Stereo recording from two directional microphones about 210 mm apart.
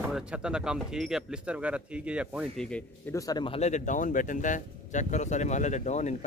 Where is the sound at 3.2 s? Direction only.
20° left (ahead or behind).